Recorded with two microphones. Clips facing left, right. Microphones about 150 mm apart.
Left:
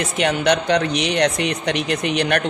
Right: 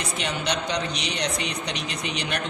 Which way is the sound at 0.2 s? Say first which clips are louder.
Left 11 dB; 65° left (ahead or behind).